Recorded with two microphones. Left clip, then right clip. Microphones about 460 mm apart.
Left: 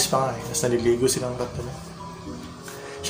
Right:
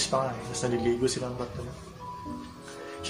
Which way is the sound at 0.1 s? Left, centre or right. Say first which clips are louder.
Left 5 dB; right.